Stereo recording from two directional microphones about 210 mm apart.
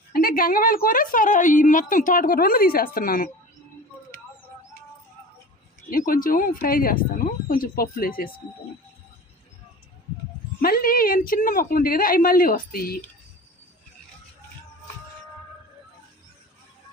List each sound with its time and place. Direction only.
0.1 s a woman's voice: 45° left (ahead or behind)
6.2 s speech: 40° left (ahead or behind)
10.6 s speech: 45° left (ahead or behind)